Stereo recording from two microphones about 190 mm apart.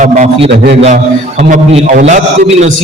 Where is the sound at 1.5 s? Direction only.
40° right (ahead or behind).